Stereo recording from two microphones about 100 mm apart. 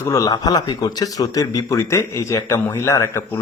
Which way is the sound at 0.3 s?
40° left (ahead or behind).